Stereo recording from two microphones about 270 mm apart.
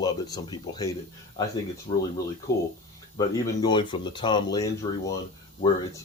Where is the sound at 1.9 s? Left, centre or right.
Centre.